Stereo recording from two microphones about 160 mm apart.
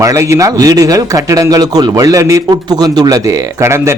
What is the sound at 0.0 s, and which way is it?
Speech, 20° right (ahead or behind).